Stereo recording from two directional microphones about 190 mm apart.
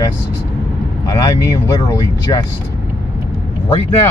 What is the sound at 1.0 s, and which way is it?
Speech, 25° left (ahead or behind).